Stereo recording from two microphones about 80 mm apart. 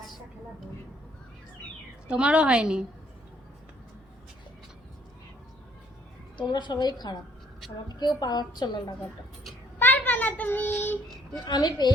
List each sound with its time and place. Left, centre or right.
2.0 s a woman's voice: centre
6.3 s a woman's voice: left
9.7 s child singing: left
11.4 s a woman's voice: left